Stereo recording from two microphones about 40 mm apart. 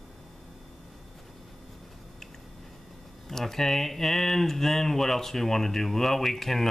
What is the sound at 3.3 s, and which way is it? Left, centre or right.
Speech, centre.